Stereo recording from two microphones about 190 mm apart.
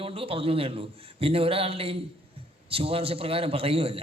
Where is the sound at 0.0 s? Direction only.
30° right (ahead or behind).